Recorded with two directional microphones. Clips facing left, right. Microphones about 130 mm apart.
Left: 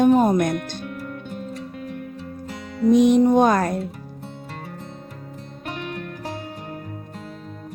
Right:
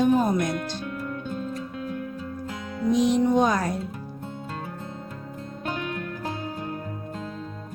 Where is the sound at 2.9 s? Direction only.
55° left (ahead or behind).